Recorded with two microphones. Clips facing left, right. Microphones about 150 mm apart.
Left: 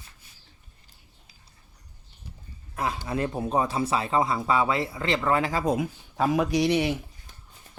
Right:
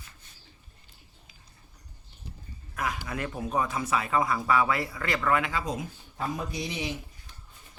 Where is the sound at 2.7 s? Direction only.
30° left (ahead or behind).